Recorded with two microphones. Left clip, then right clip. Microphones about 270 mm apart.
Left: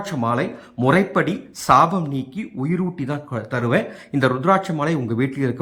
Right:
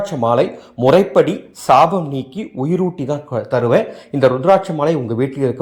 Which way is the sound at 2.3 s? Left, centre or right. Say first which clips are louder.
Right 9 dB; centre.